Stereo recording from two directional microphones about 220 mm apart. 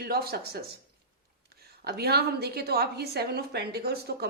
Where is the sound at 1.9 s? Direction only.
45° right (ahead or behind).